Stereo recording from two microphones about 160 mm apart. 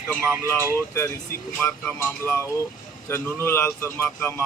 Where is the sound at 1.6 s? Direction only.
15° left (ahead or behind).